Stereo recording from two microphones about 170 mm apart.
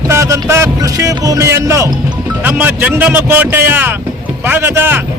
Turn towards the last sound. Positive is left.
turn(degrees=-10)  # may be behind; listen again after turning